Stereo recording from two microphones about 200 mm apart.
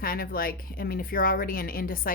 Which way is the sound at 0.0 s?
45° left (ahead or behind).